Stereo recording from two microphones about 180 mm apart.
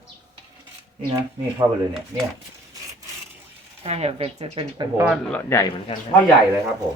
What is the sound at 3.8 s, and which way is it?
Speech, 35° right (ahead or behind).